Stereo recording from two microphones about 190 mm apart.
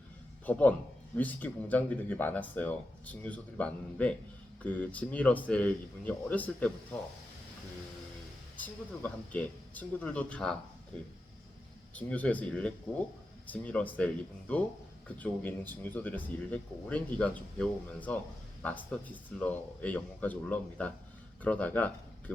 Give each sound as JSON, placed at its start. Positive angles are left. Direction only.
{"t": 0.4, "sound": "a man's voice", "side_deg": 10}
{"t": 8.5, "sound": "a man's voice", "side_deg": 10}
{"t": 11.9, "sound": "a man's voice", "side_deg": 5}